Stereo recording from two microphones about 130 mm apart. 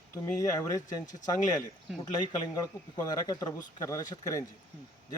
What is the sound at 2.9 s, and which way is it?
Speech, 30° left (ahead or behind).